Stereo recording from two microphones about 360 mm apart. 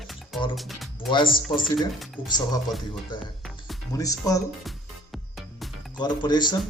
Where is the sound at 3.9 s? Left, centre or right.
Centre.